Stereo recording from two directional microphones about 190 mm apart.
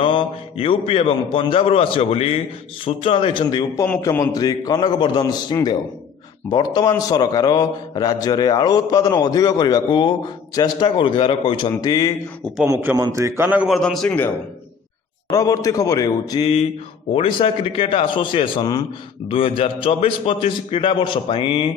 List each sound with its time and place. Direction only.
0.0 s a man's voice: 30° left (ahead or behind)
12.6 s a man's voice: 15° right (ahead or behind); by 14.3 s 5° left (ahead or behind)
15.3 s a man's voice: 20° left (ahead or behind)
17.1 s a man's voice: 30° left (ahead or behind)